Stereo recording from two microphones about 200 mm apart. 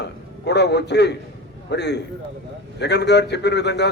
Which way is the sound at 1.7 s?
60° left (ahead or behind).